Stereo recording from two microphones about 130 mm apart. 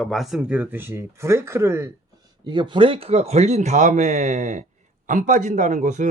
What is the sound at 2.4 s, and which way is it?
Speech, 35° right (ahead or behind).